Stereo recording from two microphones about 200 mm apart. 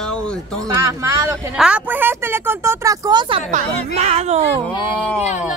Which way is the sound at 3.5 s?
35° right (ahead or behind).